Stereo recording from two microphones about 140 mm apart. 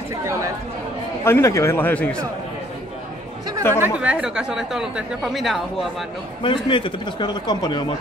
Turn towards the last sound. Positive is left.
turn(degrees=30)  # may be behind; listen again after turning